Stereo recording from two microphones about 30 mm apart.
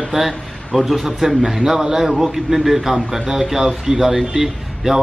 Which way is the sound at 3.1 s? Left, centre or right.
Right.